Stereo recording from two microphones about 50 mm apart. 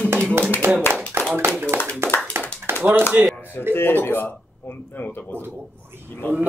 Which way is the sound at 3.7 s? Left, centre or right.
Left.